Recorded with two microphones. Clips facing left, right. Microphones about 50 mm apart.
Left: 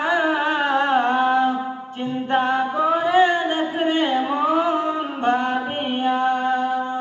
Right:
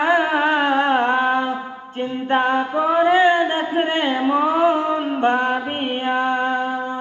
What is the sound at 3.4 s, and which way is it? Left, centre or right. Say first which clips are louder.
Music: right 2 dB; right.